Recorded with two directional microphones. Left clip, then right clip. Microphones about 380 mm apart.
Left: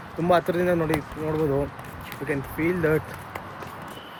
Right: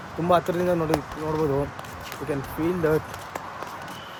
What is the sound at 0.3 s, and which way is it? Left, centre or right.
Speech, centre.